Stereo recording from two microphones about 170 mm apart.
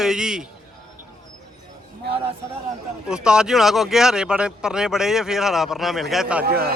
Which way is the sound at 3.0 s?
5° right (ahead or behind).